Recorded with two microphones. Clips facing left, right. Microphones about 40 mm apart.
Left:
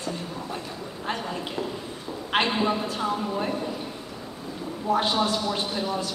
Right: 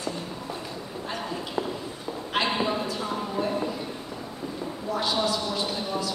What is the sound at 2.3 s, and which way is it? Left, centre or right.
Clip-clop, left.